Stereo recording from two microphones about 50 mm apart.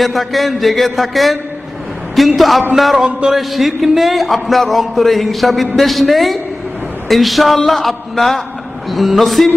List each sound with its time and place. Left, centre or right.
0.0 s speech: centre
3.1 s a sound: right
3.3 s speech: centre